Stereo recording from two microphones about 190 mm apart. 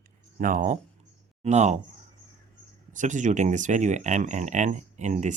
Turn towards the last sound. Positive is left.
turn(degrees=-40)  # may be behind; listen again after turning